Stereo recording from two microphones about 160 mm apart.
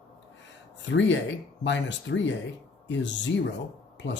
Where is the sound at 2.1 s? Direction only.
90° left.